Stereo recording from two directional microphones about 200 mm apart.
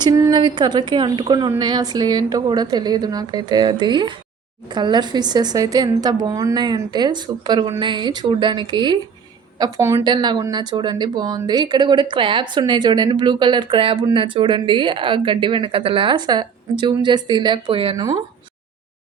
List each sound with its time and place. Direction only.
0.0 s speech: 20° right (ahead or behind)